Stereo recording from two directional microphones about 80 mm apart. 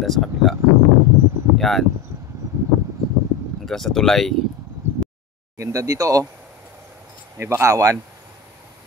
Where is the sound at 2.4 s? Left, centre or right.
Right.